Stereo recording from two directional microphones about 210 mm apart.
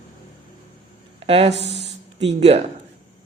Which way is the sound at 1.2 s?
30° right (ahead or behind).